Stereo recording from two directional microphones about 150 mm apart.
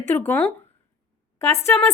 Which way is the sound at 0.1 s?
10° left (ahead or behind).